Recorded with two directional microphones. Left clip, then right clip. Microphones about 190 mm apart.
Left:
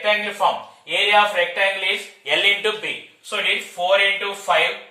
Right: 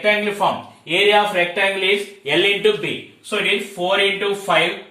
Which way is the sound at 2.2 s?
20° left (ahead or behind).